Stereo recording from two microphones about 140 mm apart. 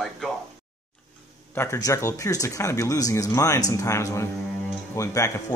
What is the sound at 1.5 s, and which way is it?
Speech, 20° left (ahead or behind).